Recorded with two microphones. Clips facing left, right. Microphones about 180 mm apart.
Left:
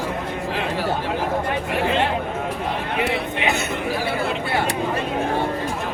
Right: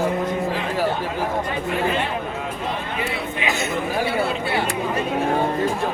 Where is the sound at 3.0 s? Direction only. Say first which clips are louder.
Left 3 dB; 65° left (ahead or behind).